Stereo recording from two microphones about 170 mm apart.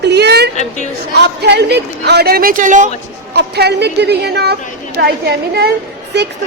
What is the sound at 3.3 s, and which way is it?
A woman's voice, 75° right (ahead or behind).